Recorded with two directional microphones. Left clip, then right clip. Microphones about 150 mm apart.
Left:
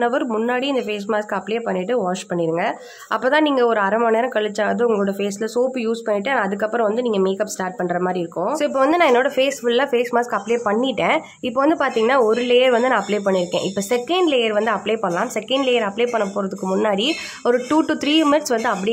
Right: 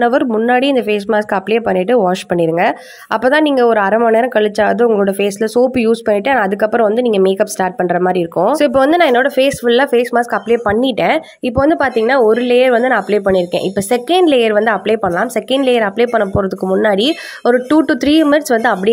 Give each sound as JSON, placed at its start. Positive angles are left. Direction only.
{"t": 0.0, "sound": "speech", "side_deg": -35}